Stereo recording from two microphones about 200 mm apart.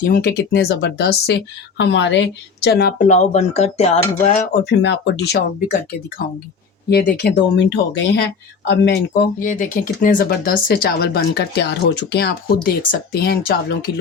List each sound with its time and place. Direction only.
0.0 s speech: 50° left (ahead or behind)
3.1 s speech: 35° left (ahead or behind)
4.6 s speech: 60° left (ahead or behind)
6.9 s speech: 55° left (ahead or behind)
9.4 s speech: 40° left (ahead or behind)